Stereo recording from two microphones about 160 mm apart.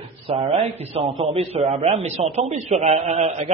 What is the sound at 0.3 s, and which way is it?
A man's voice, 40° right (ahead or behind).